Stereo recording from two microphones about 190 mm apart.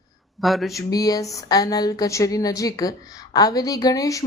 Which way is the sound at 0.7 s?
20° left (ahead or behind).